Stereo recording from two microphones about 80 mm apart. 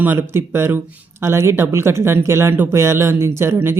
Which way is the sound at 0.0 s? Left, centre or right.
Right.